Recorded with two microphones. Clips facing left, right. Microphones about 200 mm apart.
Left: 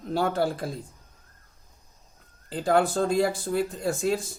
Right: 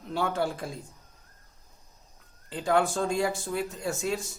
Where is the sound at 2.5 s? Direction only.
35° left (ahead or behind).